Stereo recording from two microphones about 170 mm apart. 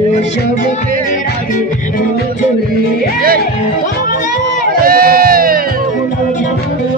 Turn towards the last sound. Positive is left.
turn(degrees=-60)  # may be behind; listen again after turning